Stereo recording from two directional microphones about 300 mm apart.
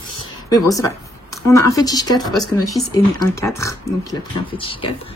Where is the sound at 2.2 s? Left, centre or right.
Centre.